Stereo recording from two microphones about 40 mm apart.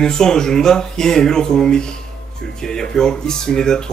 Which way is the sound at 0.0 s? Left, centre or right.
Centre.